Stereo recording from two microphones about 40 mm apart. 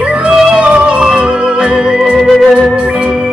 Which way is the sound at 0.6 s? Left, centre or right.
Right.